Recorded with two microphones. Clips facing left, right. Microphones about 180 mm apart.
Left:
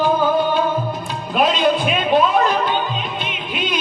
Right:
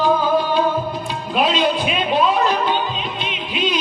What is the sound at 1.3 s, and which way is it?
Music, 50° left (ahead or behind).